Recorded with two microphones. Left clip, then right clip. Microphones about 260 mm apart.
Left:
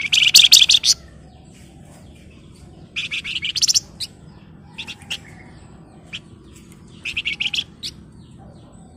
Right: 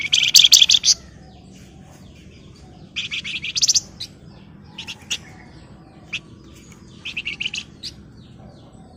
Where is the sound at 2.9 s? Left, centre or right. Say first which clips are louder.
Left 1 dB; centre.